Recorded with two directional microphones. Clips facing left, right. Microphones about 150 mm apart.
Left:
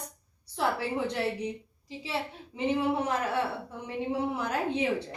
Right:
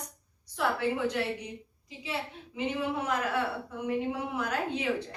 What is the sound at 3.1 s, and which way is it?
A woman's voice, 30° left (ahead or behind).